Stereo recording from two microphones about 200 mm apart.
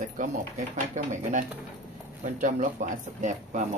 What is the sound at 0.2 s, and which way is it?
Speech, 40° right (ahead or behind).